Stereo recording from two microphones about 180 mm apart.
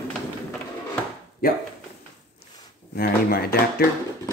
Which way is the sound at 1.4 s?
55° left (ahead or behind).